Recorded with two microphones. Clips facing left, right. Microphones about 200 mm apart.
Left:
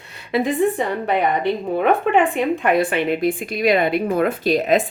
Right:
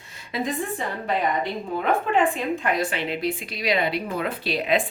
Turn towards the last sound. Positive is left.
turn(degrees=45)  # may be behind; listen again after turning